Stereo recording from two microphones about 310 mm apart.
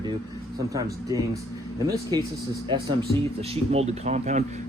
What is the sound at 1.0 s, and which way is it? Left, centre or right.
Speech, centre.